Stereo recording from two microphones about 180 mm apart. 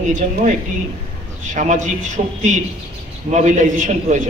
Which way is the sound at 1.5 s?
45° right (ahead or behind).